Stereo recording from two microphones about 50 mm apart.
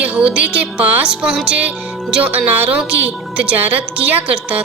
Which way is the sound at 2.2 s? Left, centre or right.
Right.